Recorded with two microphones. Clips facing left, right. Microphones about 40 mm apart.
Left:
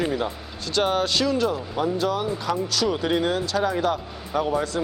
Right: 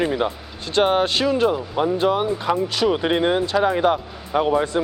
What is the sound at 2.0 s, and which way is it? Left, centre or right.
Speech, right.